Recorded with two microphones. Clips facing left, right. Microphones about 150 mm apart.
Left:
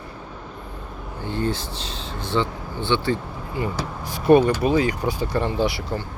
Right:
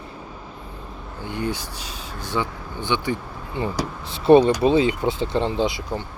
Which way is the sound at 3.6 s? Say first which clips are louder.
Right 1 dB; 30° right (ahead or behind).